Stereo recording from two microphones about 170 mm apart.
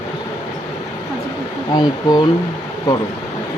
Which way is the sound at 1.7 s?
25° left (ahead or behind).